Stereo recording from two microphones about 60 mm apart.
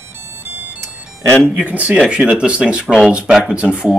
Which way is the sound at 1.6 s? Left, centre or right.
Right.